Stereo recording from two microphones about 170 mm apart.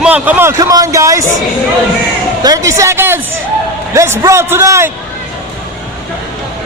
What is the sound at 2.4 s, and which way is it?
A man's voice, 20° right (ahead or behind).